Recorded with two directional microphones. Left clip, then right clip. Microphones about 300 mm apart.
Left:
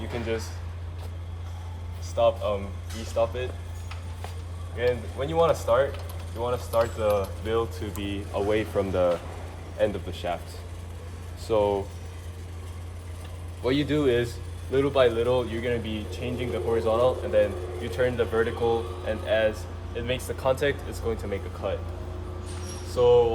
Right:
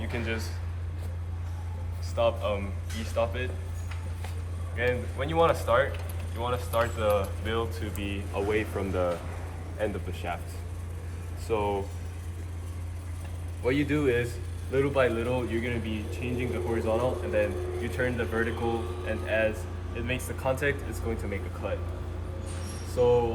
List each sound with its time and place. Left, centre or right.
0.1 s speech: left
2.1 s speech: left
4.8 s speech: left
11.4 s speech: left
13.7 s speech: left
23.0 s speech: left